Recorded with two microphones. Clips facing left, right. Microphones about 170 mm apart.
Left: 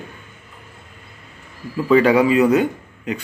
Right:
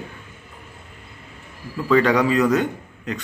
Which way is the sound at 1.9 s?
10° left (ahead or behind).